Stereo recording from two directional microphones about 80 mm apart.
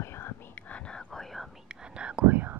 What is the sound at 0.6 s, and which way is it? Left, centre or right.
Whispering, centre.